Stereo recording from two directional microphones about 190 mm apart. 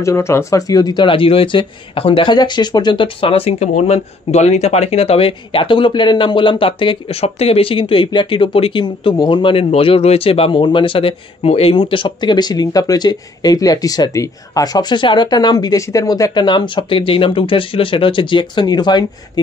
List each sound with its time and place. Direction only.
0.0 s speech: 15° left (ahead or behind)